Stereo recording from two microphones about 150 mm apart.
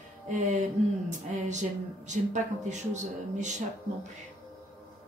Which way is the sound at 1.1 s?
55° right (ahead or behind).